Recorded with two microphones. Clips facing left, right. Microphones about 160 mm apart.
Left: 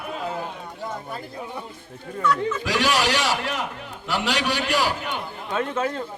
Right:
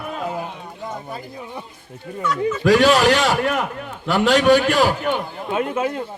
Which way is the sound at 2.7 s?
50° right (ahead or behind).